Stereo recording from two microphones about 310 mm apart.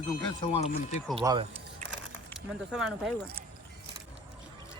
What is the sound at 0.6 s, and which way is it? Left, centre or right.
Speech, left.